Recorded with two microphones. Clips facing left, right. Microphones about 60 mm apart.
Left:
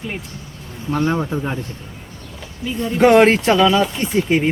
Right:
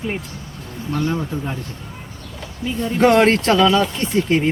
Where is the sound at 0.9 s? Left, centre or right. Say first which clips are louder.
Left 3 dB; left.